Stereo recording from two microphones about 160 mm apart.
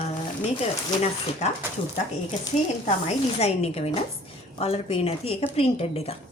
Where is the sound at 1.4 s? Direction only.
45° left (ahead or behind).